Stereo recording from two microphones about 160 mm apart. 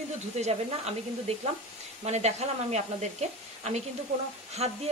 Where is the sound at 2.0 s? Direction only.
45° right (ahead or behind).